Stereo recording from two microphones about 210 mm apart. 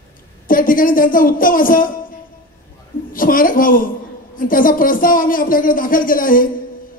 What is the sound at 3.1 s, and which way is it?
Speech, 40° left (ahead or behind).